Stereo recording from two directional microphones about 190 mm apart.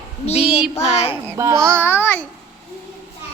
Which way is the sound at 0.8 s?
35° left (ahead or behind).